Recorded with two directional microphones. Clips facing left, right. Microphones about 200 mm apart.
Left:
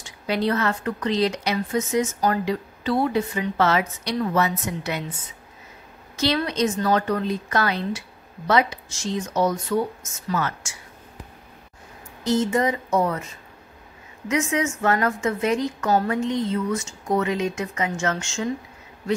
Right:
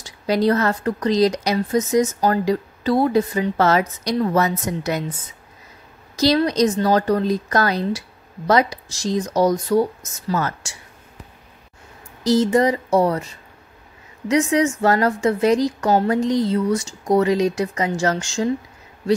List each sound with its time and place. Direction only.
0.0 s a woman's voice: 40° right (ahead or behind)
6.1 s a woman's voice: 40° right (ahead or behind)
12.2 s a woman's voice: 35° right (ahead or behind)